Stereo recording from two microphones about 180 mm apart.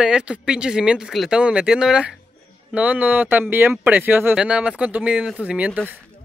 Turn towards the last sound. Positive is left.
turn(degrees=-10)  # may be behind; listen again after turning